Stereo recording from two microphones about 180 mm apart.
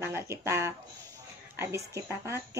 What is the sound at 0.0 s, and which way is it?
Speech, 15° right (ahead or behind).